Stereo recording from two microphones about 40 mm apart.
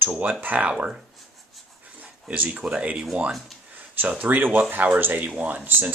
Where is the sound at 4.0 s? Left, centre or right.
Right.